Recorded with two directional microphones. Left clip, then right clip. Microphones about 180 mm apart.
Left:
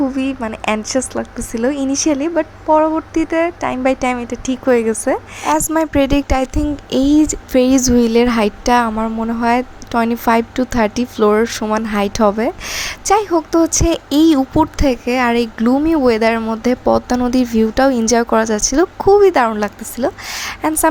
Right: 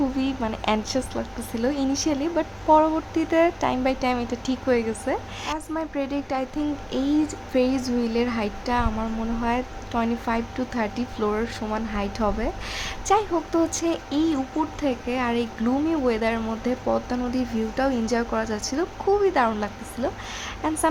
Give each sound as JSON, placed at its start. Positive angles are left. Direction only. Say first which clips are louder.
{"t": 0.3, "sound": "speech", "louder": "left 6 dB", "side_deg": 10}
{"t": 4.6, "sound": "a woman's voice", "louder": "left 10 dB", "side_deg": 25}
{"t": 5.5, "sound": "a woman's voice", "louder": "left 15 dB", "side_deg": 30}